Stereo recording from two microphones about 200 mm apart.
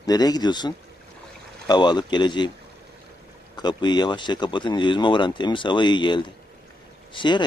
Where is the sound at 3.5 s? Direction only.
20° left (ahead or behind).